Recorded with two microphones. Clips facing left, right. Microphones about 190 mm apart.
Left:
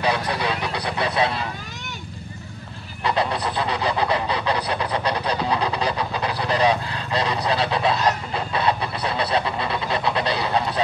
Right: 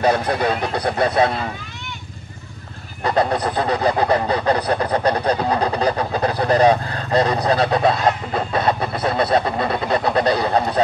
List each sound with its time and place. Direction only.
0.0 s goose: 45° right (ahead or behind)
3.0 s goose: 45° right (ahead or behind)